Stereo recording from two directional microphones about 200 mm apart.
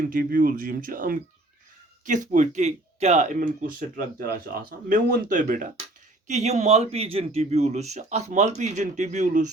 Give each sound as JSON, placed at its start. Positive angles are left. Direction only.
{"t": 0.0, "sound": "speech", "side_deg": -45}